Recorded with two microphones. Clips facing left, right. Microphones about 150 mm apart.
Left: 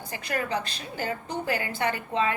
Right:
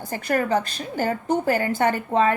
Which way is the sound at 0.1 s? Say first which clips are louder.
Right 8 dB; 40° right (ahead or behind).